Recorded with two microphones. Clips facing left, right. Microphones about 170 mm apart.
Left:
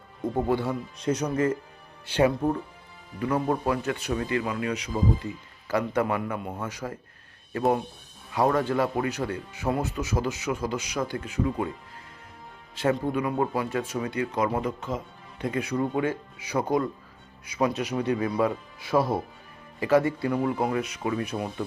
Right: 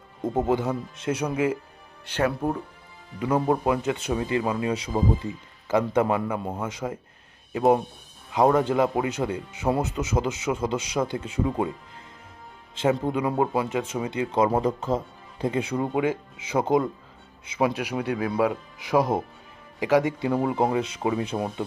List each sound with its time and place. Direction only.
0.2 s speech: 20° right (ahead or behind)
0.9 s speech: 5° right (ahead or behind)
2.0 s speech: 10° left (ahead or behind)
3.2 s speech: 20° right (ahead or behind)
13.1 s speech: 20° right (ahead or behind)
17.6 s speech: 10° right (ahead or behind); by 21.5 s 25° right (ahead or behind)